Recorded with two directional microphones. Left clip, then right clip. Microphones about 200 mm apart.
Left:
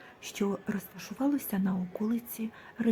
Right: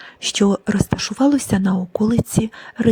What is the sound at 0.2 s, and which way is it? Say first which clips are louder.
Speech: right 15 dB; 35° right (ahead or behind).